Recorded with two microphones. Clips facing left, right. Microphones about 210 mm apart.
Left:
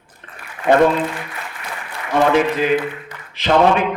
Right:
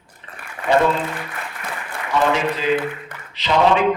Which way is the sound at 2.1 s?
55° left (ahead or behind).